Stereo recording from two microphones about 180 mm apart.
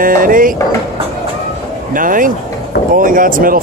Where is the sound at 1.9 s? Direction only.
50° right (ahead or behind).